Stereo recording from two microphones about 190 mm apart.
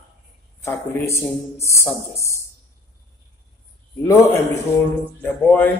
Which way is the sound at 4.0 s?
15° left (ahead or behind).